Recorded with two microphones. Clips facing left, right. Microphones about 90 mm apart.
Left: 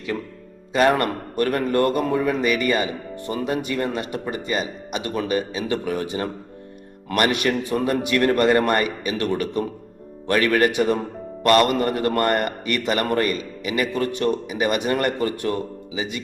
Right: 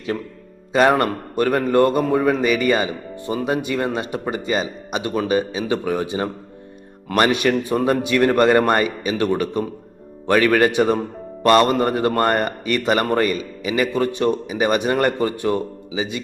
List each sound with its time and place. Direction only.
0.7 s a man's voice: 25° right (ahead or behind)